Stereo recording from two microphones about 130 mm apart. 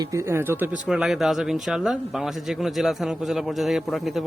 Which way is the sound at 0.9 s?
5° right (ahead or behind).